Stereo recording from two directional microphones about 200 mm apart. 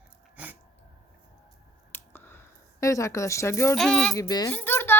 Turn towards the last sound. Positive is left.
turn(degrees=10)  # may be behind; listen again after turning